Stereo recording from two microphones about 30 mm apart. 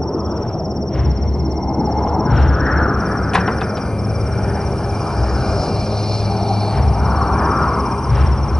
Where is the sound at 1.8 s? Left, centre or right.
Centre.